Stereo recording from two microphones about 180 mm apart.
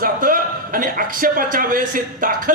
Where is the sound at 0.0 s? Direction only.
50° right (ahead or behind).